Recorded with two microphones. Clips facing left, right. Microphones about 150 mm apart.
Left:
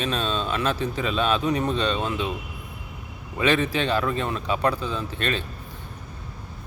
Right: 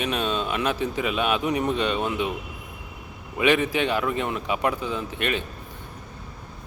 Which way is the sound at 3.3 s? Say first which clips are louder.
Right 1 dB; 15° right (ahead or behind).